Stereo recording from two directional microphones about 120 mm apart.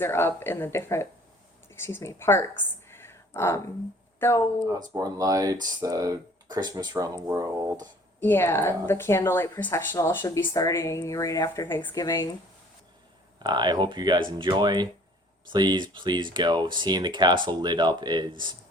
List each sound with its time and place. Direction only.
0.0 s speech: 20° left (ahead or behind)
2.9 s a sound: 20° left (ahead or behind)
4.2 s speech: 20° left (ahead or behind)
4.9 s speech: 30° right (ahead or behind)
8.2 s speech: 20° left (ahead or behind)
13.4 s speech: 35° right (ahead or behind)